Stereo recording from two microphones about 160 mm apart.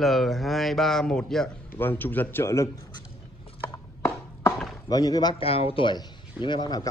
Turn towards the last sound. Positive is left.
turn(degrees=25)  # may be behind; listen again after turning